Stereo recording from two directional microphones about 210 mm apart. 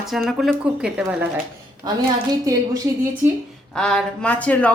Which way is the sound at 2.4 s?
15° right (ahead or behind).